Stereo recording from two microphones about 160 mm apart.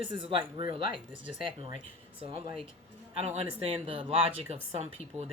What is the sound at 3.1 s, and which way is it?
Speech, 40° right (ahead or behind).